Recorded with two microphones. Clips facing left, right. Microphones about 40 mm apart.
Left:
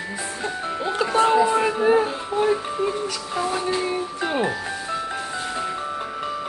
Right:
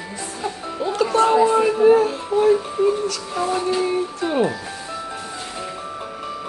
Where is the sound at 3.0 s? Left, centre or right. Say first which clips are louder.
Right 2 dB; centre.